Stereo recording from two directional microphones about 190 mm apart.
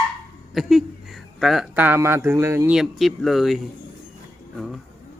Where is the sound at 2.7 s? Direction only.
Centre (ahead or behind).